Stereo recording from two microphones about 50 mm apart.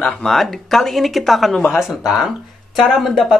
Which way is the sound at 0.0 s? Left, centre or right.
Centre.